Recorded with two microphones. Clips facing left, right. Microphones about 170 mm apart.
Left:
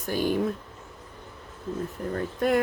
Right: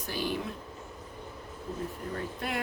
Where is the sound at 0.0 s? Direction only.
45° left (ahead or behind).